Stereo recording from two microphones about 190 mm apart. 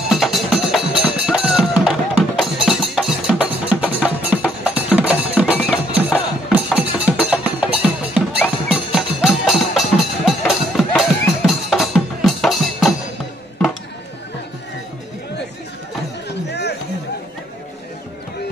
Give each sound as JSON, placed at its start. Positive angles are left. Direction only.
{"t": 0.1, "sound": "music", "side_deg": 0}
{"t": 16.3, "sound": "music", "side_deg": 60}